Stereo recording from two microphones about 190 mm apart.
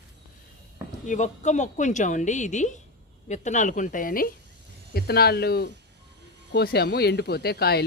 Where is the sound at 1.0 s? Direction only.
40° left (ahead or behind).